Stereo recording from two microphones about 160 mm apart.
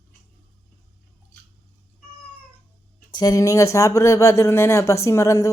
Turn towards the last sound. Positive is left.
turn(degrees=20)  # may be behind; listen again after turning